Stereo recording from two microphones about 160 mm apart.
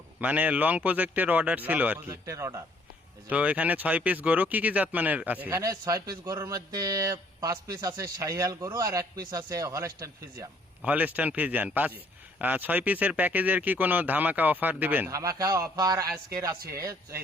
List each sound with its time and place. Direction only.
0.2 s speech: 10° right (ahead or behind)
3.2 s speech: 10° right (ahead or behind)
10.8 s speech: 10° right (ahead or behind)